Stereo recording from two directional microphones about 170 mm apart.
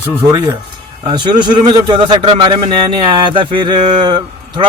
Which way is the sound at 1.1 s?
25° right (ahead or behind).